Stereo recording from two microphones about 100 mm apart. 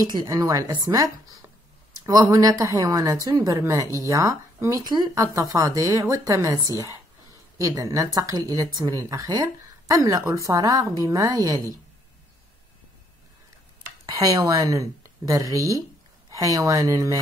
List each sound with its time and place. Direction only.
0.2 s speech: 35° right (ahead or behind)
14.1 s speech: 35° right (ahead or behind)